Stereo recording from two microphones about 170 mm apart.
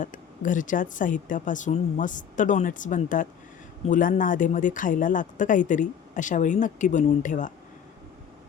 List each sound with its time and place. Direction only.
0.0 s speech: 50° left (ahead or behind)